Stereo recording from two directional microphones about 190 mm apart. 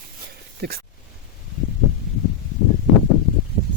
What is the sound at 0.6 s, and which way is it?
Speech, 60° right (ahead or behind).